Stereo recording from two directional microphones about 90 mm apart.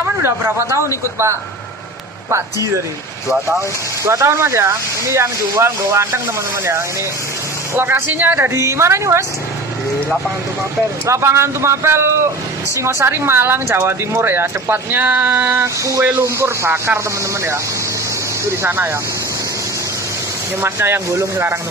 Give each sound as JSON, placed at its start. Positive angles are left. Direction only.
{"t": 0.2, "sound": "speech", "side_deg": -30}
{"t": 4.0, "sound": "speech", "side_deg": -35}
{"t": 11.1, "sound": "speech", "side_deg": -30}
{"t": 18.6, "sound": "speech", "side_deg": -25}
{"t": 20.6, "sound": "speech", "side_deg": -25}